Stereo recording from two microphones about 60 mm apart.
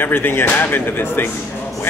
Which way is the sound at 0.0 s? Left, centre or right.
Left.